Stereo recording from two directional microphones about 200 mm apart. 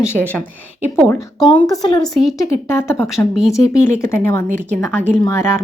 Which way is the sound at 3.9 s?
15° left (ahead or behind).